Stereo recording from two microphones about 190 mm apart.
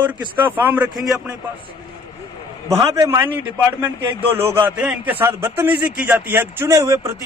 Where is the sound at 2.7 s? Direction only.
15° right (ahead or behind).